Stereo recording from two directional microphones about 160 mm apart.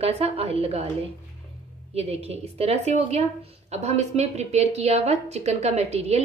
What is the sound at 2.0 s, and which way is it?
A woman's voice, 40° right (ahead or behind).